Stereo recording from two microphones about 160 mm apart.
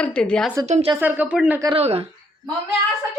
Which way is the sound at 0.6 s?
45° right (ahead or behind).